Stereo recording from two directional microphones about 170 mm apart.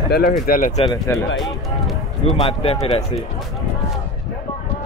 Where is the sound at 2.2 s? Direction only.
35° left (ahead or behind).